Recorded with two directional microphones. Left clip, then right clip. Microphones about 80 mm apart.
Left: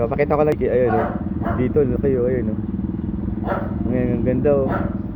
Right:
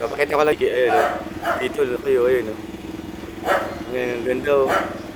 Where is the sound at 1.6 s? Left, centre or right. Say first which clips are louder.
Left 5 dB; right.